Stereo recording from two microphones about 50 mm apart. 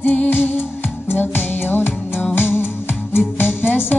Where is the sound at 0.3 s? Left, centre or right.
Left.